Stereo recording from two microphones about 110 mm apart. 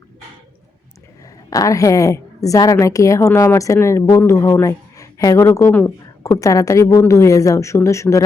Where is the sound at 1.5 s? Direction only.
30° left (ahead or behind).